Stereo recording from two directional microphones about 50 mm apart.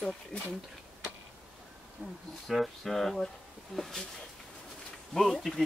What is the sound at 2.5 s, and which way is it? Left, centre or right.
Music, centre.